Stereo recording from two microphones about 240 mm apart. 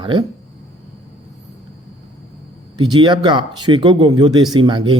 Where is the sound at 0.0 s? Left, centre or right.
Centre.